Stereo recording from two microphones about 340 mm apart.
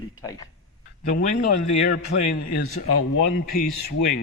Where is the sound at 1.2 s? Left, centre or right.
Left.